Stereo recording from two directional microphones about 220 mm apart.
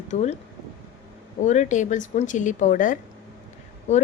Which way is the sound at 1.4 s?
35° left (ahead or behind).